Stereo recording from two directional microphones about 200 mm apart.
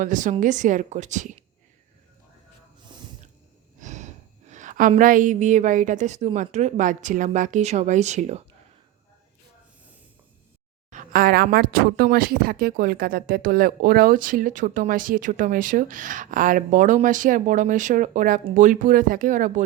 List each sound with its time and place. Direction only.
0.0 s a woman's voice: 40° right (ahead or behind)
3.8 s a woman's voice: 35° right (ahead or behind)
10.9 s a woman's voice: 45° right (ahead or behind)